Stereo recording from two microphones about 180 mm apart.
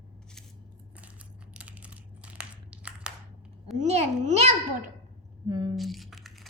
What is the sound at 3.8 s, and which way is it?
Speech, 40° right (ahead or behind).